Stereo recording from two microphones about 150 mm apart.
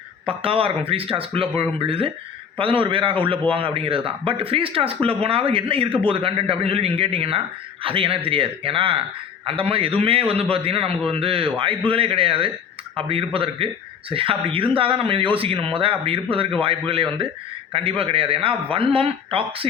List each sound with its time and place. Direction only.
0.3 s speech: 40° right (ahead or behind)